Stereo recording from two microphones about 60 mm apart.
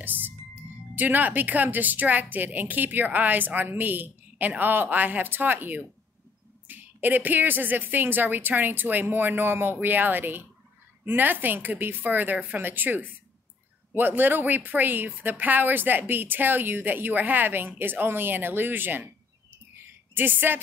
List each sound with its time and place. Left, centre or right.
0.0 s music: right
2.3 s a woman's voice: right
20.2 s a woman's voice: right